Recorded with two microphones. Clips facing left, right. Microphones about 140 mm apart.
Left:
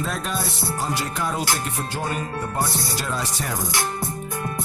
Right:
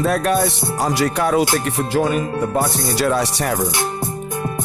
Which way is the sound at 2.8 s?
75° right (ahead or behind).